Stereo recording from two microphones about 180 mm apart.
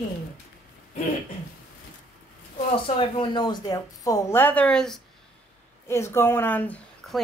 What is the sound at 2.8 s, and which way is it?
Speech, 25° left (ahead or behind).